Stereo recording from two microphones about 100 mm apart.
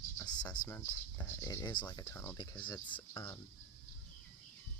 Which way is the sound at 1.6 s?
50° left (ahead or behind).